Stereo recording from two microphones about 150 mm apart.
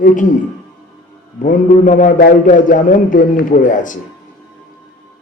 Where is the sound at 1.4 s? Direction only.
60° left (ahead or behind).